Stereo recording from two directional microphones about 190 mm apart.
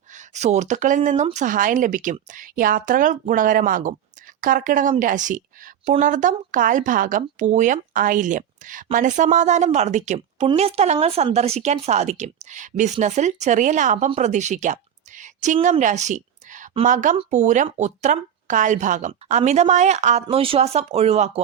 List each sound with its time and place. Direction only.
0.1 s a woman's voice: 40° right (ahead or behind)